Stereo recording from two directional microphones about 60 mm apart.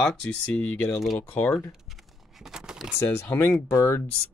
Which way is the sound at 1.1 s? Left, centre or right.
Left.